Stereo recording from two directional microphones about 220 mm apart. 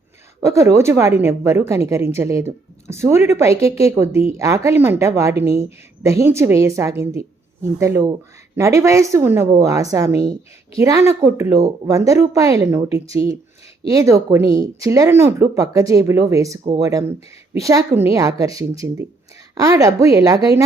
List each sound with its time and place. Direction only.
0.4 s a woman's voice: 15° right (ahead or behind)